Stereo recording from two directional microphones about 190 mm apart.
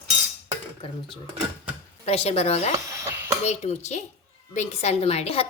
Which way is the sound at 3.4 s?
35° left (ahead or behind).